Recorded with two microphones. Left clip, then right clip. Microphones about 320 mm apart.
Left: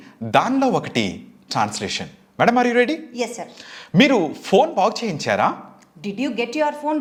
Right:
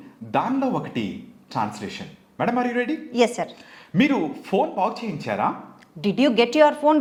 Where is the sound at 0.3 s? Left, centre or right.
Left.